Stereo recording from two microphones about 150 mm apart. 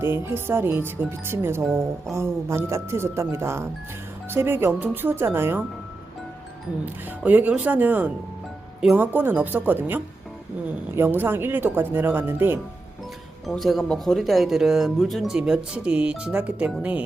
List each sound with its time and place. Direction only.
0.0 s speech: 15° right (ahead or behind)
6.8 s speech: 10° right (ahead or behind)
13.4 s speech: centre (ahead or behind)